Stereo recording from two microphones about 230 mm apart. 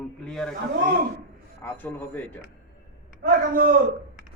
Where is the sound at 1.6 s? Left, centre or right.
Centre.